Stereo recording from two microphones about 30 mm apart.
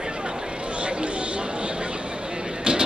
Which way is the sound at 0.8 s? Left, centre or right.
Right.